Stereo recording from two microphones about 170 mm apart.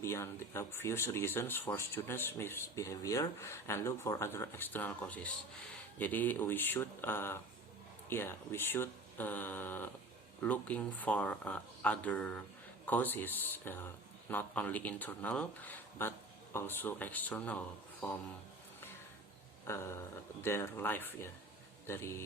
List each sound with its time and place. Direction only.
0.0 s speech: 15° left (ahead or behind)
19.6 s speech: 15° left (ahead or behind)